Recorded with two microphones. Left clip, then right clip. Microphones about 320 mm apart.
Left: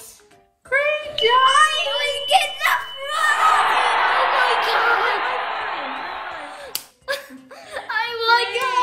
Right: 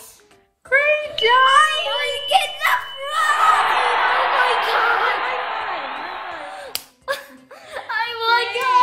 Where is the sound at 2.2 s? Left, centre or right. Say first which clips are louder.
Even; centre.